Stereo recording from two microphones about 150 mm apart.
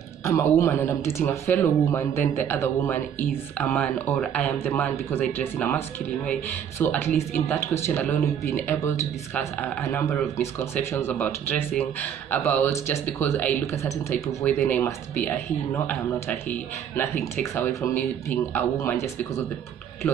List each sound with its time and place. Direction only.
0.2 s speech: 20° left (ahead or behind)
6.8 s speech: 15° left (ahead or behind)